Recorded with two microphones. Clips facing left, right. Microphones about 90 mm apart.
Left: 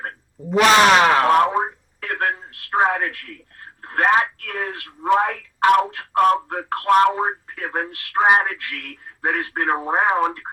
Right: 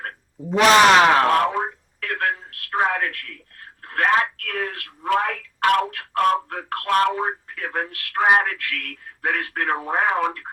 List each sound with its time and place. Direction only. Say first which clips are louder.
0.5 s speech: even; centre (ahead or behind)
1.3 s telephone: left 3 dB; 25° left (ahead or behind)
3.8 s speech: left 2 dB; 25° left (ahead or behind)